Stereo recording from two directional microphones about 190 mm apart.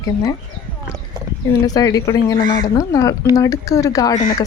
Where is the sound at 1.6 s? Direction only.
20° left (ahead or behind).